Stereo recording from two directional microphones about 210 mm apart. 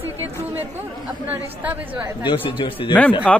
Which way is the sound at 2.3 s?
25° left (ahead or behind).